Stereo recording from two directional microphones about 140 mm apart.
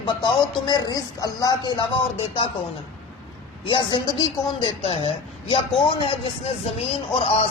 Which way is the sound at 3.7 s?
35° left (ahead or behind).